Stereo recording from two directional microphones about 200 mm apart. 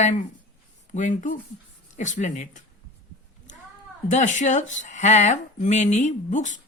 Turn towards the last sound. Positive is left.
turn(degrees=40)  # may be behind; listen again after turning